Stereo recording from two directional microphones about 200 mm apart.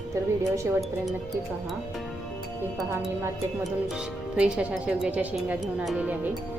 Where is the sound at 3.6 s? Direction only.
5° right (ahead or behind).